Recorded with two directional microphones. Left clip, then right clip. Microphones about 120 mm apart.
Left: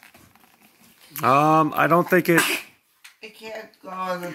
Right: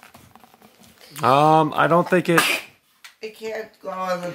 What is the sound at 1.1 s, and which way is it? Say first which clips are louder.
Speech: right 2 dB; 10° right (ahead or behind).